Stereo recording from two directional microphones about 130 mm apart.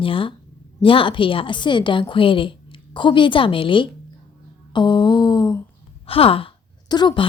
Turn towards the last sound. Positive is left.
turn(degrees=35)  # may be behind; listen again after turning